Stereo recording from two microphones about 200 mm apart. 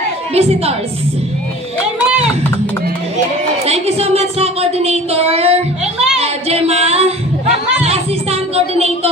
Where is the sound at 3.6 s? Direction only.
30° right (ahead or behind).